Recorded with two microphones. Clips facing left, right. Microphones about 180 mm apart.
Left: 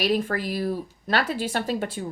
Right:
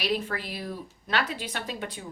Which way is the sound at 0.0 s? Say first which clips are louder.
Left 6 dB; 45° left (ahead or behind).